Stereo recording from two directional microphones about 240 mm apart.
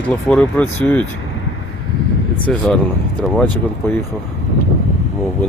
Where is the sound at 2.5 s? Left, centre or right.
Centre.